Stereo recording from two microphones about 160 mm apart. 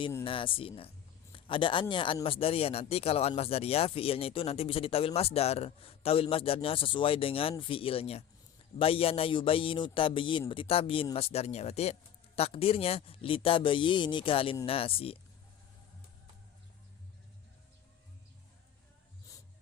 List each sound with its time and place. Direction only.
0.3 s speech: 35° left (ahead or behind)